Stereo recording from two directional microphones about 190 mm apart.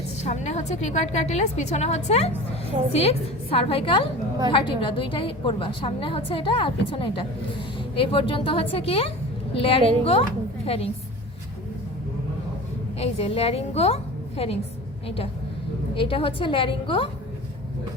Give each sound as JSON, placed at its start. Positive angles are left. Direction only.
{"t": 0.2, "sound": "a woman's voice", "side_deg": 35}
{"t": 13.0, "sound": "a woman's voice", "side_deg": 30}